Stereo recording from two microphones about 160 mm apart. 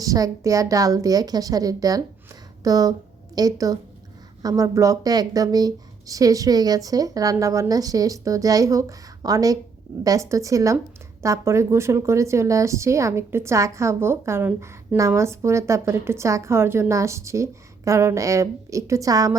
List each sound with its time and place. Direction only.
0.0 s a woman's voice: 20° right (ahead or behind)